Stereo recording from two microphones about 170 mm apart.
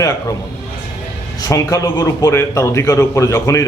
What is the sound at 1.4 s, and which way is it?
A man's voice, 20° left (ahead or behind).